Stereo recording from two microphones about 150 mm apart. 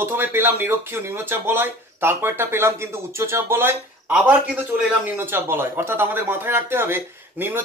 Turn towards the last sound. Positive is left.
turn(degrees=-15)  # may be behind; listen again after turning